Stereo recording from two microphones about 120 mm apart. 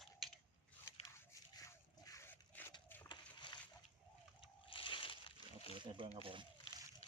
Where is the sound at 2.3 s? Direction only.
15° left (ahead or behind).